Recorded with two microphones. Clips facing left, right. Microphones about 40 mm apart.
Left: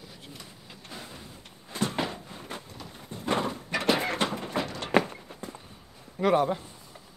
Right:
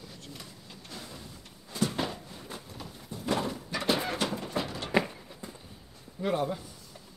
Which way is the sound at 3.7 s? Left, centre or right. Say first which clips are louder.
Left 4 dB; left.